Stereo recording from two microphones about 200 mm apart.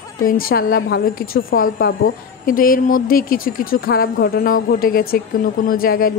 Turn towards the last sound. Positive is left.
turn(degrees=45)  # may be behind; listen again after turning